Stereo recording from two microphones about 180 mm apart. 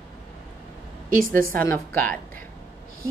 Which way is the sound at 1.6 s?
10° left (ahead or behind).